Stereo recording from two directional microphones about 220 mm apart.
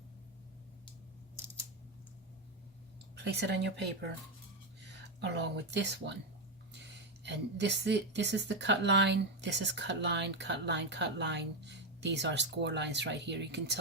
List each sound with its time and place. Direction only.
3.2 s a woman's voice: 50° right (ahead or behind)
4.9 s a woman's voice: 50° right (ahead or behind)